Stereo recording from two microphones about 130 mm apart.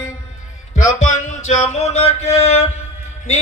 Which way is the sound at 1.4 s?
60° left (ahead or behind).